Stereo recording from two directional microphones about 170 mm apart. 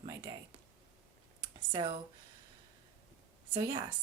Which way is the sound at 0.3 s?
20° right (ahead or behind).